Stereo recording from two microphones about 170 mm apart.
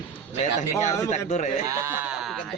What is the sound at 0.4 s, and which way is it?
Speech, 45° left (ahead or behind).